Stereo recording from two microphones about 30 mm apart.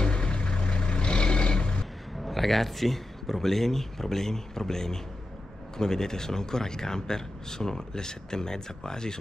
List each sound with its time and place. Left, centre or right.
0.0 s vehicle: left
2.2 s a man's voice: centre; by 9.2 s left